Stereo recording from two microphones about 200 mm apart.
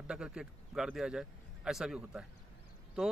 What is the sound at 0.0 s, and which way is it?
A man's voice, 5° right (ahead or behind).